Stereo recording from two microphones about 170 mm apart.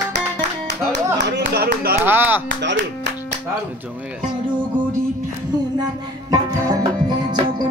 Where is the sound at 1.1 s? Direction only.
70° right (ahead or behind).